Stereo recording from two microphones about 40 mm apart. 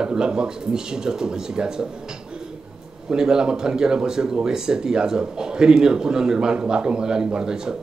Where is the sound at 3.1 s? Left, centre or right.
Centre.